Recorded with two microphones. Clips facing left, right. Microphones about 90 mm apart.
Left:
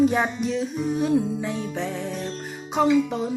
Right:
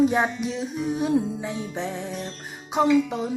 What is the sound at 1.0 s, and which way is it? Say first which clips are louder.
Music: left 1 dB; 20° right (ahead or behind).